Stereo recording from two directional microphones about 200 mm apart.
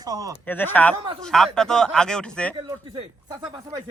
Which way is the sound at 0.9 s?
20° right (ahead or behind).